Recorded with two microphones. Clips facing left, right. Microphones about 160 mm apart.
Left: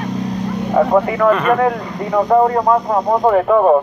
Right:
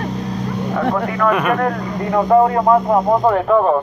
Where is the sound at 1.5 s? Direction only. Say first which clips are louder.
Left 2 dB; centre (ahead or behind).